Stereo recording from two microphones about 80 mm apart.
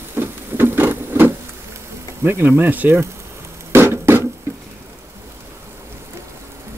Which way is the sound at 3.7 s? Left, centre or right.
Right.